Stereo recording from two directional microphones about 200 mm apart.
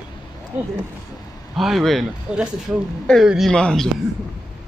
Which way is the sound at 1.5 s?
Centre (ahead or behind).